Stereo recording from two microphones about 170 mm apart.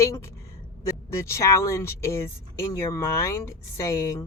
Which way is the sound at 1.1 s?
15° left (ahead or behind).